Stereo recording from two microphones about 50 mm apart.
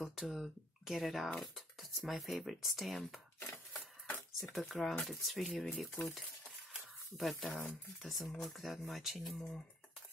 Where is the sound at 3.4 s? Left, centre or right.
Left.